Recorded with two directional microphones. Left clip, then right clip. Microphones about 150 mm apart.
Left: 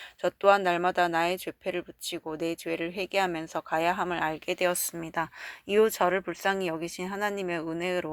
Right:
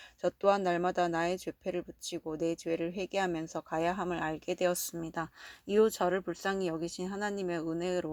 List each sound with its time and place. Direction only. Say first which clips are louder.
0.2 s speech: left 6 dB; 50° right (ahead or behind)